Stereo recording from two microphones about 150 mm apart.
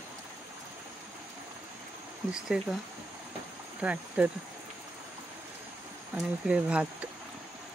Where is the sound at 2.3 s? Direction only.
5° right (ahead or behind).